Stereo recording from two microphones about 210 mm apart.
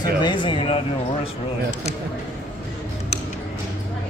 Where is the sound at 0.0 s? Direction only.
20° left (ahead or behind).